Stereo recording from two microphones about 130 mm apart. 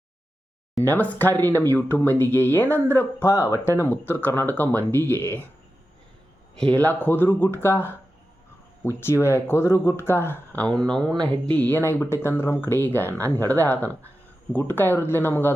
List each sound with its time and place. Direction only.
0.8 s speech: 15° left (ahead or behind)
6.7 s speech: 15° left (ahead or behind)